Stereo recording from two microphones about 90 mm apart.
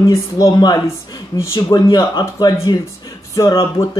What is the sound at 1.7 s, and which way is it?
Speech, 55° left (ahead or behind).